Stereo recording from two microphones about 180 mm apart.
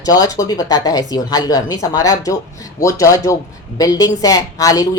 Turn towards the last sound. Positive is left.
turn(degrees=20)  # may be behind; listen again after turning